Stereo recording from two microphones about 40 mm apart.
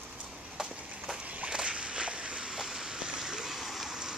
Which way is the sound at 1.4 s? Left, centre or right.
Right.